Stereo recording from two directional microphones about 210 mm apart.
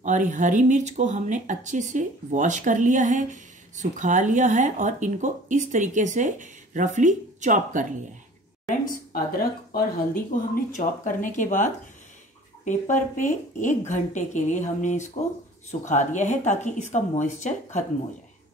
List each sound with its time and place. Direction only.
0.0 s speech: 35° right (ahead or behind)
8.6 s speech: 45° left (ahead or behind)